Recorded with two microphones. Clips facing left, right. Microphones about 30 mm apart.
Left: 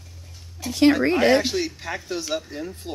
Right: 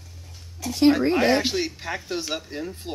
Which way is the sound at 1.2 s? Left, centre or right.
Centre.